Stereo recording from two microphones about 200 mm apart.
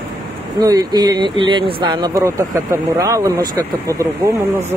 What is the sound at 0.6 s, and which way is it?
Speech, 20° right (ahead or behind).